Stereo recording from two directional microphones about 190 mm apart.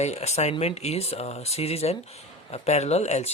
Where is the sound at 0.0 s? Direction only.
35° left (ahead or behind).